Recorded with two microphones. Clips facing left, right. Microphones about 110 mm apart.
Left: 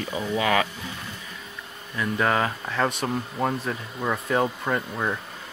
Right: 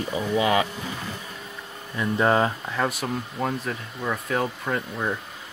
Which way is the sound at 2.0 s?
25° right (ahead or behind).